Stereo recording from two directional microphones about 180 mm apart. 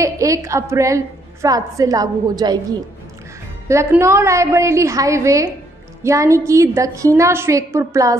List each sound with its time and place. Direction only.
0.0 s a woman's voice: 15° right (ahead or behind)